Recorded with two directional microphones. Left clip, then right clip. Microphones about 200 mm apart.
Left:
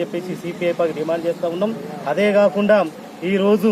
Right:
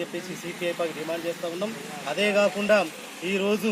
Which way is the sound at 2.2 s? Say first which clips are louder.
Left 7 dB; 5° left (ahead or behind).